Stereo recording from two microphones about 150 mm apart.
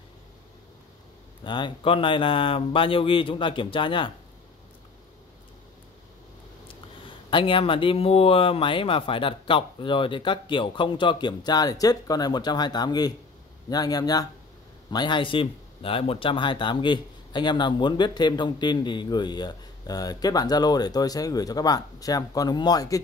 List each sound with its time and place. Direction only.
1.4 s speech: 30° left (ahead or behind)
7.2 s speech: 35° left (ahead or behind)